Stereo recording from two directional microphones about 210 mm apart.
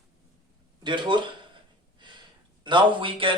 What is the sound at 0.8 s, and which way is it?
A man's voice, 20° right (ahead or behind).